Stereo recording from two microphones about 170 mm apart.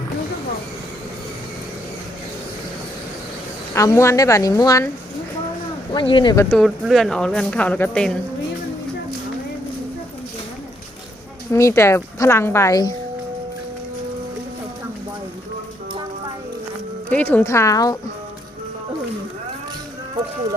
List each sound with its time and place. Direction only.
3.8 s a woman's voice: 15° left (ahead or behind)
5.9 s speech: 30° left (ahead or behind)
6.5 s speech: centre (ahead or behind)
11.5 s a woman's voice: 15° left (ahead or behind)
17.1 s a woman's voice: 10° left (ahead or behind)